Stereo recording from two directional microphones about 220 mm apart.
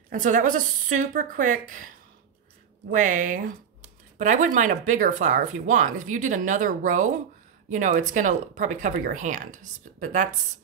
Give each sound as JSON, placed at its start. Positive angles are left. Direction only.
{"t": 0.1, "sound": "speech", "side_deg": -35}
{"t": 2.9, "sound": "speech", "side_deg": -35}